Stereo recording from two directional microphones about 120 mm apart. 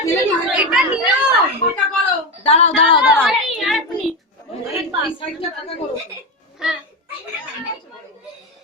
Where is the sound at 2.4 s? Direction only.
60° left (ahead or behind).